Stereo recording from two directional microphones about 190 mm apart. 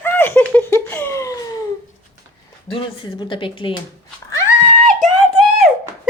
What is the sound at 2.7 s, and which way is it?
Speech, 25° left (ahead or behind).